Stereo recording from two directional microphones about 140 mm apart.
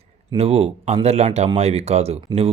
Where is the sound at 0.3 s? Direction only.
45° right (ahead or behind).